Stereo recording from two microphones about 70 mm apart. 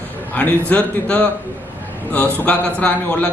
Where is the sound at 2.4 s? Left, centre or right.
Centre.